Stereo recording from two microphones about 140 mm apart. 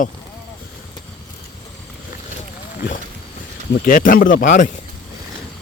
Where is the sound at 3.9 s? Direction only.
75° left (ahead or behind).